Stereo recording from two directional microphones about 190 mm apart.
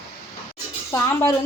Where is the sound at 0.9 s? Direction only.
15° left (ahead or behind).